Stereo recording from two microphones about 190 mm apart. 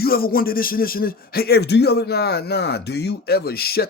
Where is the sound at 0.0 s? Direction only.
50° left (ahead or behind).